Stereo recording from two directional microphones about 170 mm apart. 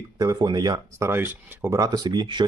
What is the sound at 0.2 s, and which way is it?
Speech, 25° right (ahead or behind).